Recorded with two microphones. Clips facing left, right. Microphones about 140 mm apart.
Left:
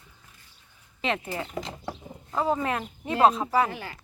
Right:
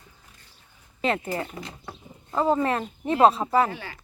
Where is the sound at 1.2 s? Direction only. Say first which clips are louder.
Right 4 dB; 10° left (ahead or behind).